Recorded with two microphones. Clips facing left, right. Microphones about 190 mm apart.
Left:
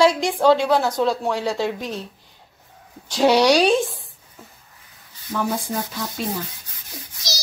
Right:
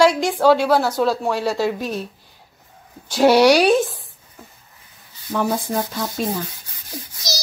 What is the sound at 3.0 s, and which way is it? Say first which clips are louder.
Speech: right 3 dB; 10° right (ahead or behind).